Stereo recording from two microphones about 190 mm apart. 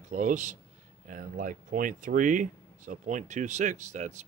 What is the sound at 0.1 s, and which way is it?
A man's voice, 40° right (ahead or behind).